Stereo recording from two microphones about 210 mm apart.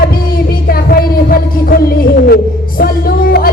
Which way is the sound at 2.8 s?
45° left (ahead or behind).